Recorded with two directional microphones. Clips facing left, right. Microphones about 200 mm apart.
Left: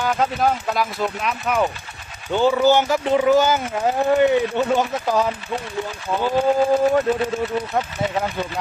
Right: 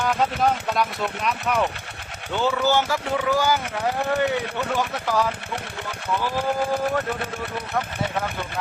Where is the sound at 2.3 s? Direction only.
15° left (ahead or behind).